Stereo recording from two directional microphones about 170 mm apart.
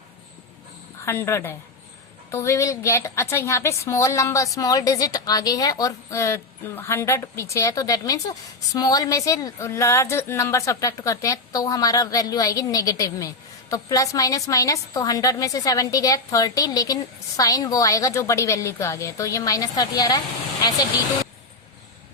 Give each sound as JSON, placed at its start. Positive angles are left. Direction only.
{"t": 1.0, "sound": "a woman's voice", "side_deg": 15}